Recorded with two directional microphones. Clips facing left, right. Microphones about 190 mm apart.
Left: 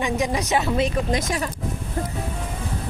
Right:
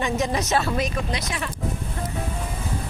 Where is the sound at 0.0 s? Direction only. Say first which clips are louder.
Left 1 dB; 15° left (ahead or behind).